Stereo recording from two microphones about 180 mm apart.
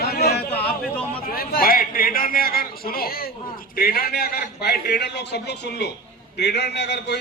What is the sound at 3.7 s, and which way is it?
A man's voice, 55° left (ahead or behind).